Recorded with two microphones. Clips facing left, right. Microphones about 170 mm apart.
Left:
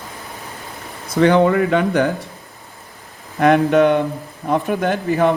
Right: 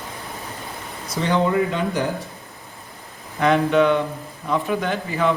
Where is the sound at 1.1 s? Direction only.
60° left (ahead or behind).